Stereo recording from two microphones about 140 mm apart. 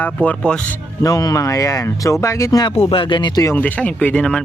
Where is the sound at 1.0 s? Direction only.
25° left (ahead or behind).